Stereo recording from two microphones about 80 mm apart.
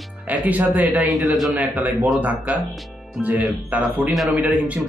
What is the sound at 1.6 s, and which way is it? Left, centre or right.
Speech, centre.